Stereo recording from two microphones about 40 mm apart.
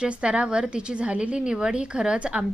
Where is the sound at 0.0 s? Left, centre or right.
Right.